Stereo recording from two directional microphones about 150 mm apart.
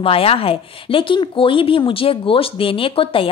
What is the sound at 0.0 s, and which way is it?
Speech, 40° left (ahead or behind).